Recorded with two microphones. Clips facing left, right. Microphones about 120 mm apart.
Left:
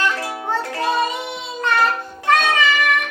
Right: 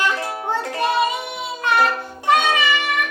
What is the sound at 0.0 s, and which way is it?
Music, 20° right (ahead or behind).